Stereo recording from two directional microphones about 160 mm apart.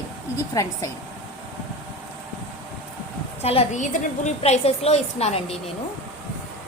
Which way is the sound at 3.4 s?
45° left (ahead or behind).